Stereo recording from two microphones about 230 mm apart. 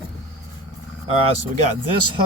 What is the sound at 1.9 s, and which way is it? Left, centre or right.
Speech, right.